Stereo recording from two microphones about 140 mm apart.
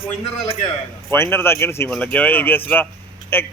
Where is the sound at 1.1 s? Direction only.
15° left (ahead or behind).